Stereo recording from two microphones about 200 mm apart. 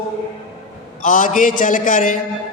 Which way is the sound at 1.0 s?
40° left (ahead or behind).